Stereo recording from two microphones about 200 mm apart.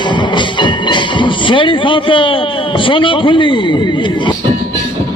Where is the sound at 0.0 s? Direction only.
25° left (ahead or behind).